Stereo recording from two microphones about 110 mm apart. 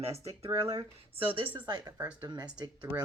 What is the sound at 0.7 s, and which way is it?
Speech, 55° right (ahead or behind).